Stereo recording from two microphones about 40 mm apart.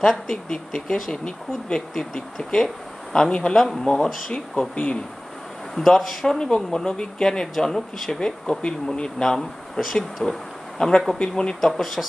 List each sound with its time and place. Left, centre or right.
0.0 s speech: centre
3.5 s speech: centre
3.8 s speech: left
5.8 s speech: centre
6.2 s speech: centre
11.6 s speech: centre